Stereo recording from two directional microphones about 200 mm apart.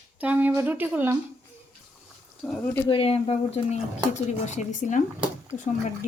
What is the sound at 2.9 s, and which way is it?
Speech, 30° left (ahead or behind).